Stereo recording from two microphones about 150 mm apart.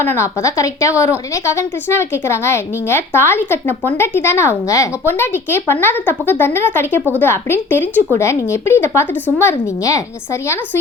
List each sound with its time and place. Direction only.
0.0 s a woman's voice: 15° left (ahead or behind)